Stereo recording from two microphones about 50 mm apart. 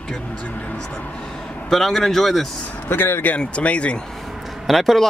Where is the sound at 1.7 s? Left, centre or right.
Centre.